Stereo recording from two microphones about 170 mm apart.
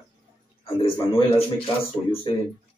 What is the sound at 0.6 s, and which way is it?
Speech, 35° left (ahead or behind).